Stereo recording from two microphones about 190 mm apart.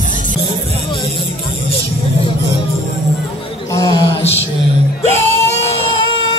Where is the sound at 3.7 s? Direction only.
20° left (ahead or behind).